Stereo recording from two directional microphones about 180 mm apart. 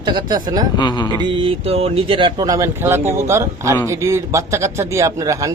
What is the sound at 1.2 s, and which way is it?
Speech, 30° right (ahead or behind).